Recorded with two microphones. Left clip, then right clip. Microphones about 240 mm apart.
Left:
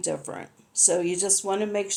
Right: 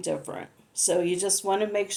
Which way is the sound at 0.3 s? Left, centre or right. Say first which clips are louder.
Even; left.